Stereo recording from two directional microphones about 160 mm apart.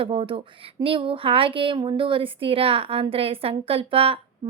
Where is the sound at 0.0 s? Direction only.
35° right (ahead or behind).